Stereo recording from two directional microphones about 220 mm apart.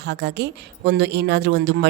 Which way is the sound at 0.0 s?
50° right (ahead or behind).